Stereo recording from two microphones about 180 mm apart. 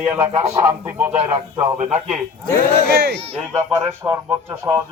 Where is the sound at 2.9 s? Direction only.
60° right (ahead or behind).